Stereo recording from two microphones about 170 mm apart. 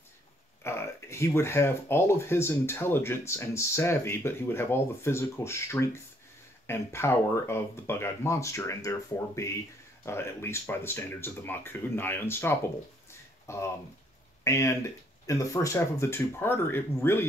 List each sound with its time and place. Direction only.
0.7 s speech: 15° left (ahead or behind)